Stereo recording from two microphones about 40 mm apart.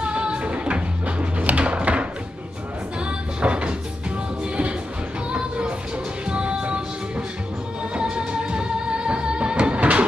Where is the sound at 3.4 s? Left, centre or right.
Right.